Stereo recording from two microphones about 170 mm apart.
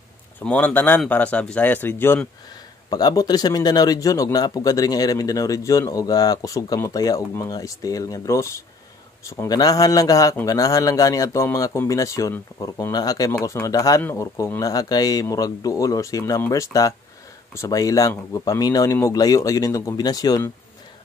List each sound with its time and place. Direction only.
0.4 s speech: 5° left (ahead or behind)